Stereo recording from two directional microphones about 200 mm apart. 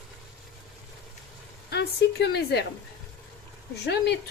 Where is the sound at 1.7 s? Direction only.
55° left (ahead or behind).